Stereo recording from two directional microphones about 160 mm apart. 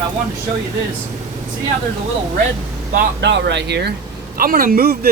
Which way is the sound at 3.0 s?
90° right.